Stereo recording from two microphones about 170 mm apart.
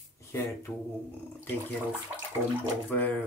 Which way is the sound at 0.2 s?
15° left (ahead or behind).